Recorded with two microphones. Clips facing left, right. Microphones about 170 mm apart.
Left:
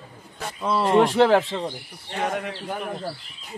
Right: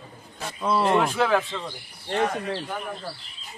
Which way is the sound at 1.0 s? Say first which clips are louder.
Left 5 dB; 30° left (ahead or behind).